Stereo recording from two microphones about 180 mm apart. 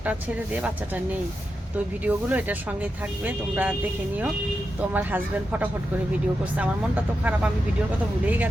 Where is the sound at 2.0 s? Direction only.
10° right (ahead or behind).